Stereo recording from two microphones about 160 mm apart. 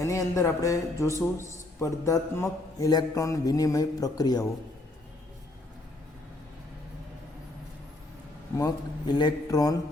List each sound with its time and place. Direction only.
0.0 s a man's voice: 20° left (ahead or behind)
8.5 s a man's voice: 25° left (ahead or behind)